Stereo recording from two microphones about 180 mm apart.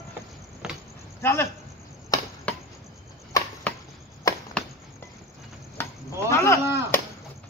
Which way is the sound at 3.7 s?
10° left (ahead or behind).